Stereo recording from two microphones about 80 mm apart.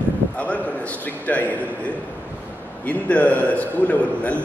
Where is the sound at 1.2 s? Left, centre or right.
Centre.